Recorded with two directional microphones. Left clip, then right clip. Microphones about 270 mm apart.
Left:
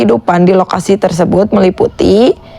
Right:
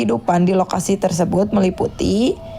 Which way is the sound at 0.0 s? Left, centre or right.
Left.